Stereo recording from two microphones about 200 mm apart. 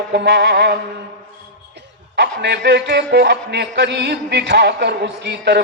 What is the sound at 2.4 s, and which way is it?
A man's voice, 55° right (ahead or behind).